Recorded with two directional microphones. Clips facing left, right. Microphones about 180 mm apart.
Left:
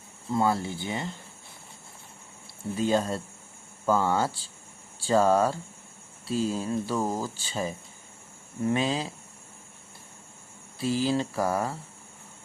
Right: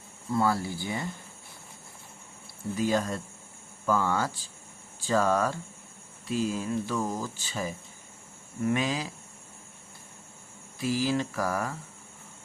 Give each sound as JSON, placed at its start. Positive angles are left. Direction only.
{"t": 0.3, "sound": "mantra", "side_deg": 20}
{"t": 2.7, "sound": "mantra", "side_deg": 25}
{"t": 5.0, "sound": "speech", "side_deg": 30}
{"t": 8.6, "sound": "mantra", "side_deg": 30}
{"t": 10.8, "sound": "mantra", "side_deg": 30}